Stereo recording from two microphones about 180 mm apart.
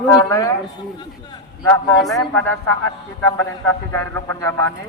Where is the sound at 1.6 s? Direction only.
15° left (ahead or behind).